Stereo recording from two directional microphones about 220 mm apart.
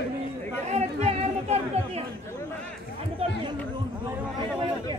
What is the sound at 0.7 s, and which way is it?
Chatter, 30° right (ahead or behind).